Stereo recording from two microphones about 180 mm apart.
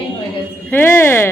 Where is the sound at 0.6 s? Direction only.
10° left (ahead or behind).